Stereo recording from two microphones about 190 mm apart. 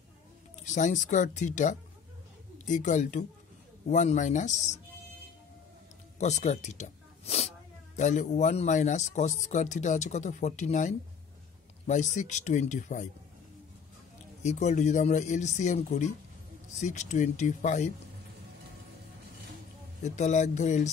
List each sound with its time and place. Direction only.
0.7 s speech: 40° left (ahead or behind)
6.1 s speech: 35° left (ahead or behind)
14.4 s speech: 40° left (ahead or behind)
20.0 s speech: 40° left (ahead or behind)